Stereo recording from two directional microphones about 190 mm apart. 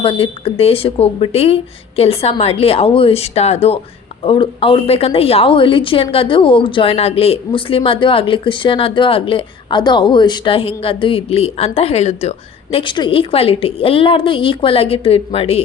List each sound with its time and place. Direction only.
0.0 s a woman's voice: 30° left (ahead or behind)